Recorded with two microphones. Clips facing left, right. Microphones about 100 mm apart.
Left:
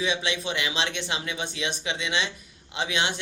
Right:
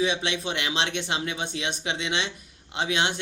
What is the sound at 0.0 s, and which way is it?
Speech, 50° right (ahead or behind).